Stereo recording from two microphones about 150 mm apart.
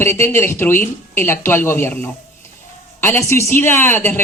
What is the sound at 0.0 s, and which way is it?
Speech, 15° left (ahead or behind).